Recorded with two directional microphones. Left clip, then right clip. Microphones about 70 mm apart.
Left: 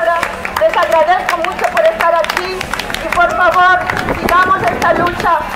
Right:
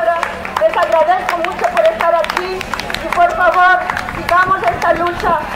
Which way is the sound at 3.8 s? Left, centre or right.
Left.